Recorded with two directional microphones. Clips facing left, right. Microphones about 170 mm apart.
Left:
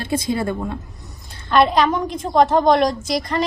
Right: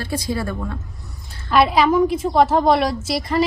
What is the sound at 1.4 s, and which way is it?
A woman's voice, 5° right (ahead or behind).